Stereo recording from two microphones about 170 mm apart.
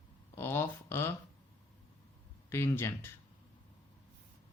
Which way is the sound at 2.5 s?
15° left (ahead or behind).